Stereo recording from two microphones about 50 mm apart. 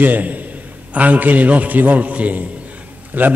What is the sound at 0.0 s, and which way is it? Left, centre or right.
A man's voice, right.